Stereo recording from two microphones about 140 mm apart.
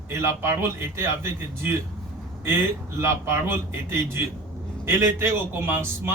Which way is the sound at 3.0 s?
20° right (ahead or behind).